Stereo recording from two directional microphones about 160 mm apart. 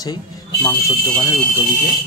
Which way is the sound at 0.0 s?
25° left (ahead or behind).